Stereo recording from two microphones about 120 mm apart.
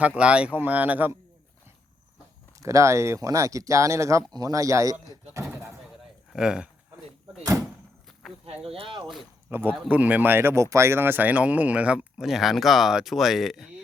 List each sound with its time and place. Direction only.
0.2 s speech: 10° right (ahead or behind)
2.6 s speech: 25° right (ahead or behind)
6.3 s speech: 5° right (ahead or behind)
8.4 s speech: 55° right (ahead or behind)
9.5 s speech: 15° right (ahead or behind); by 13.7 s centre (ahead or behind)